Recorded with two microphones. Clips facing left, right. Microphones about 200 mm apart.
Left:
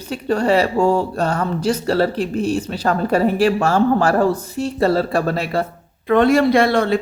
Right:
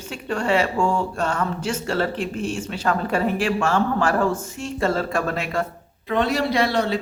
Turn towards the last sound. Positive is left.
turn(degrees=55)  # may be behind; listen again after turning